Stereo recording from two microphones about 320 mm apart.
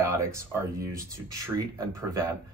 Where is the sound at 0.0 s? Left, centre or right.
Centre.